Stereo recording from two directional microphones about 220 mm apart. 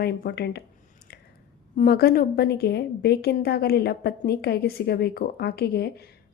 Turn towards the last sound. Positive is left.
turn(degrees=45)  # may be behind; listen again after turning